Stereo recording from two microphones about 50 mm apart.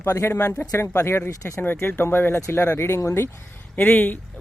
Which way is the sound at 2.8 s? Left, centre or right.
Left.